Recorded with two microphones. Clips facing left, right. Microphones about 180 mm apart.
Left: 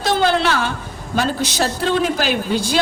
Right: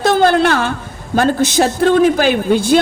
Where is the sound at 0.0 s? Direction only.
50° right (ahead or behind).